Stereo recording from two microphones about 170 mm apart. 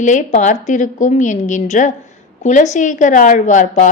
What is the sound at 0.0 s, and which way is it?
A woman's voice, 45° left (ahead or behind).